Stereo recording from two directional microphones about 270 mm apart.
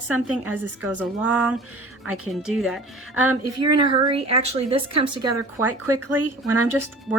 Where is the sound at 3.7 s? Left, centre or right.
Centre.